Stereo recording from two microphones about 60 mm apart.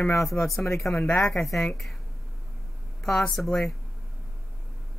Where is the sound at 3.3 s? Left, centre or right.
Centre.